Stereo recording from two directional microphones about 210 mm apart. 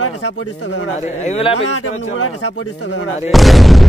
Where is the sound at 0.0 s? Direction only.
85° left.